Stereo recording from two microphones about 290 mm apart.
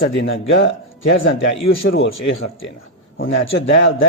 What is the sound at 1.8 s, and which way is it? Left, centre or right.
A man's voice, left.